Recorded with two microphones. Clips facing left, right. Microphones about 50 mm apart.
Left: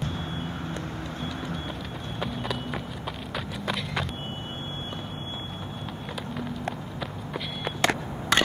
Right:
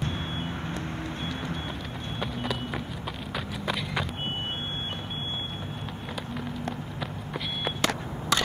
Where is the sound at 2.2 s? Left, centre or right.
Centre.